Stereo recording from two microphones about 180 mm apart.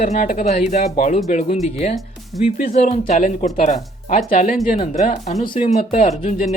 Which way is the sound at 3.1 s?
45° left (ahead or behind).